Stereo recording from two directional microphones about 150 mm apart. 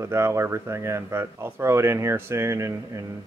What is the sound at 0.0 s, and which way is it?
Speech, 20° right (ahead or behind).